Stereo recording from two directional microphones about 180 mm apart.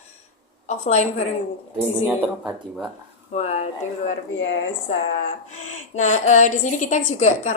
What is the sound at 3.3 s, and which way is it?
Speech, 40° left (ahead or behind).